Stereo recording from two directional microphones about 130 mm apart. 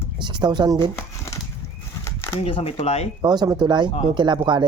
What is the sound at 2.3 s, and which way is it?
Speech, 45° left (ahead or behind).